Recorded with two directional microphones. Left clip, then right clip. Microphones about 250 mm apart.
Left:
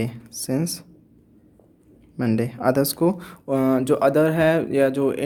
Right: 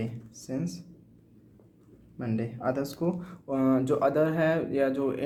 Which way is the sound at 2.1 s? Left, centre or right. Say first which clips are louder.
Left 10 dB; left.